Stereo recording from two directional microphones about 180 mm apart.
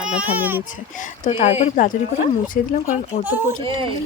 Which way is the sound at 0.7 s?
45° left (ahead or behind).